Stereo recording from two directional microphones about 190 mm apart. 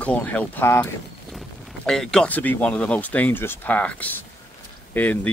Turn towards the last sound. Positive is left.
turn(degrees=10)  # may be behind; listen again after turning